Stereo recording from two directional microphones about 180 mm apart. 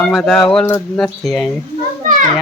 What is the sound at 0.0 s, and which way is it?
Speech, centre (ahead or behind).